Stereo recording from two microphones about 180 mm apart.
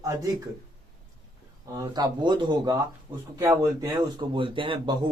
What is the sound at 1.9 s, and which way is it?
Speech, 25° right (ahead or behind).